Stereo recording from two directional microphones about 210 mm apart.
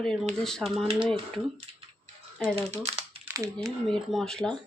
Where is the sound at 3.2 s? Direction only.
15° right (ahead or behind).